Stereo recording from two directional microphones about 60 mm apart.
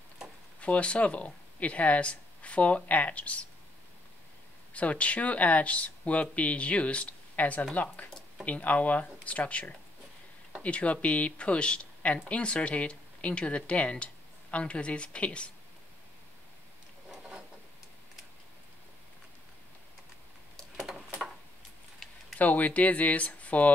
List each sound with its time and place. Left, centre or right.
0.6 s speech: left
4.7 s speech: left
22.0 s a sound: centre
22.4 s speech: left